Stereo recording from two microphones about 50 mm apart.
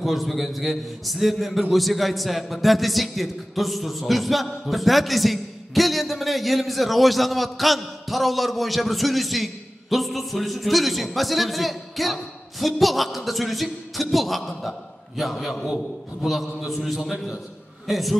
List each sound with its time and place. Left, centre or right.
0.0 s a man's voice: centre